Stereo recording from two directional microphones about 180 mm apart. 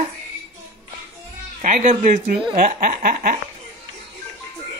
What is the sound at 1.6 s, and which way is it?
Snicker, 45° right (ahead or behind).